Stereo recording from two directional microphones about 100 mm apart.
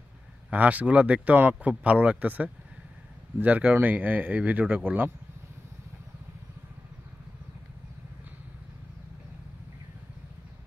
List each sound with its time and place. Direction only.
0.5 s speech: 15° right (ahead or behind)